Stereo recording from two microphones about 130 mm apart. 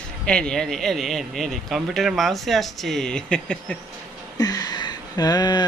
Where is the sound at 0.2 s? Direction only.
5° left (ahead or behind).